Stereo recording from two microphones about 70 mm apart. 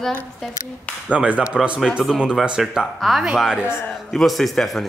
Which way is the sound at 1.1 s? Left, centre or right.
Centre.